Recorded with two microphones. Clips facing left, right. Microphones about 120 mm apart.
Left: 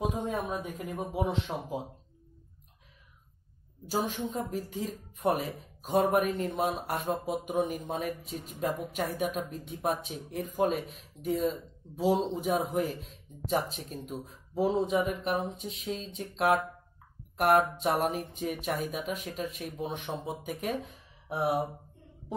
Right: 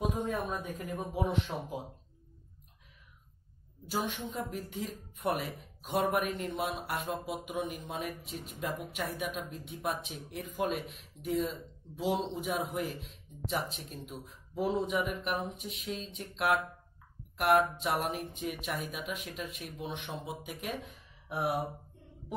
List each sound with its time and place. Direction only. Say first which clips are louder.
0.3 s speech: left 2 dB; 20° left (ahead or behind)
3.9 s speech: left 4 dB; 35° left (ahead or behind)
21.3 s speech: left 4 dB; 20° left (ahead or behind)